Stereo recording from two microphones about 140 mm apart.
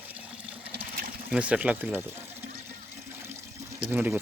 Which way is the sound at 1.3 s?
10° right (ahead or behind).